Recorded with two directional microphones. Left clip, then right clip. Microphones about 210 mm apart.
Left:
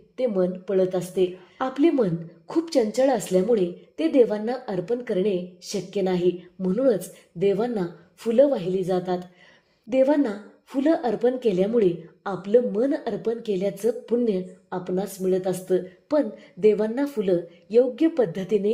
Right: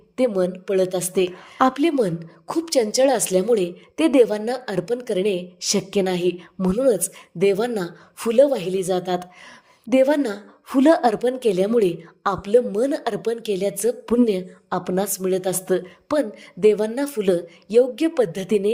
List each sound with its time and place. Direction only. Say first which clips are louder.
0.2 s a woman's voice: right 3 dB; 30° right (ahead or behind)